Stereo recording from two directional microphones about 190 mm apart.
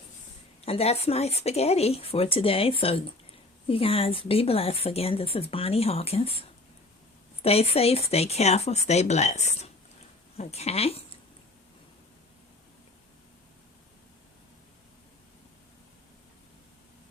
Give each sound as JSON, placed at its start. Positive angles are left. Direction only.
{"t": 0.6, "sound": "speech", "side_deg": 30}
{"t": 7.4, "sound": "speech", "side_deg": 30}